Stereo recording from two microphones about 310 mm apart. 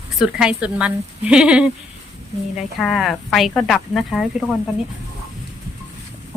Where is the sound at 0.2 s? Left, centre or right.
Centre.